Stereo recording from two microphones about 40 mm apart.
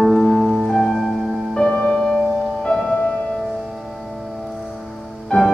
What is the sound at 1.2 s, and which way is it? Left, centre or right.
Music, centre.